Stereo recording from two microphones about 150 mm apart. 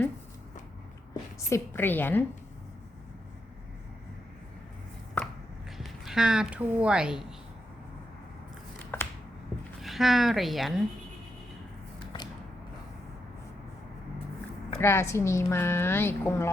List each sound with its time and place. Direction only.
1.1 s a woman's voice: 20° left (ahead or behind)
5.2 s chopping: 10° left (ahead or behind)
5.7 s a woman's voice: centre (ahead or behind)
9.8 s speech: centre (ahead or behind)
14.8 s a woman's voice: 15° left (ahead or behind)